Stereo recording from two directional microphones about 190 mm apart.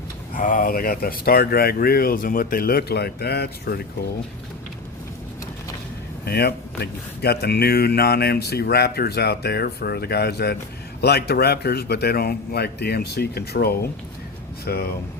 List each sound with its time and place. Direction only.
0.3 s speech: 45° left (ahead or behind)
6.2 s speech: 55° left (ahead or behind)